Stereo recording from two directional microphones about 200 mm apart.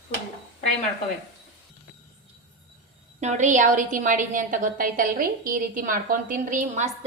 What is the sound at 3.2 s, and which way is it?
A woman's voice, 35° right (ahead or behind).